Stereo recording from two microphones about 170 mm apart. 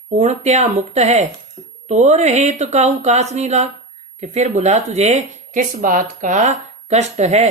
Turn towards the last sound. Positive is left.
turn(degrees=-40)  # may be behind; listen again after turning